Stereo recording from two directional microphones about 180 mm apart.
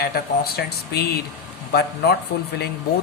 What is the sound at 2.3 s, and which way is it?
Speech, 60° left (ahead or behind).